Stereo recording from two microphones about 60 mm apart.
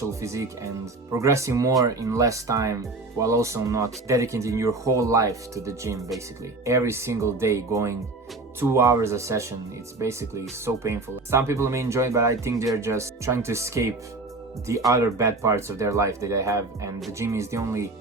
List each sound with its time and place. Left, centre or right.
0.1 s speech: right